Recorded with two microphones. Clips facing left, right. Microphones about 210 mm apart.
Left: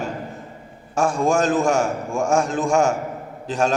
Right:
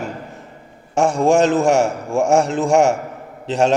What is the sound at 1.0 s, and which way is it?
A man's voice, 70° right (ahead or behind).